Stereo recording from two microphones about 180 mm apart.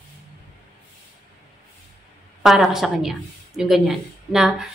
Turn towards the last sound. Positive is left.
turn(degrees=-5)  # may be behind; listen again after turning